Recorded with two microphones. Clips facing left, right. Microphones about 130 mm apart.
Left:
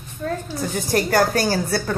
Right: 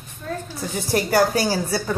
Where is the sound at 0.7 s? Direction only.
5° right (ahead or behind).